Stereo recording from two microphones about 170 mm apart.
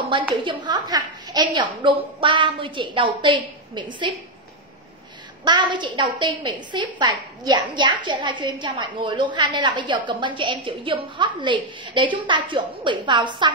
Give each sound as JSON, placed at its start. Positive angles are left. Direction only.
{"t": 0.3, "sound": "a woman's voice", "side_deg": -30}
{"t": 5.4, "sound": "a woman's voice", "side_deg": -25}